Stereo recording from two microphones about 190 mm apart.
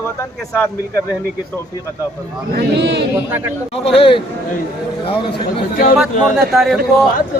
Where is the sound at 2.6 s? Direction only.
60° right (ahead or behind).